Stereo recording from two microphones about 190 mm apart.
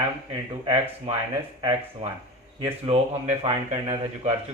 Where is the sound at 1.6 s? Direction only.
25° right (ahead or behind).